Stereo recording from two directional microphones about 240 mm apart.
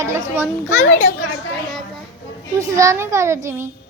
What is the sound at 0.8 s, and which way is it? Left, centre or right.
Speech, left.